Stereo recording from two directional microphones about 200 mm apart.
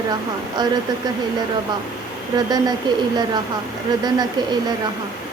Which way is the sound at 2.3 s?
20° right (ahead or behind).